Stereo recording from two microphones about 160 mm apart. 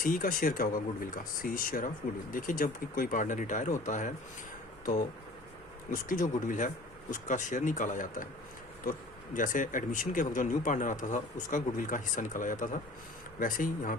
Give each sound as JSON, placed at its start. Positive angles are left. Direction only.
{"t": 0.0, "sound": "speech", "side_deg": 60}
{"t": 6.1, "sound": "speech", "side_deg": 55}
{"t": 9.3, "sound": "speech", "side_deg": 55}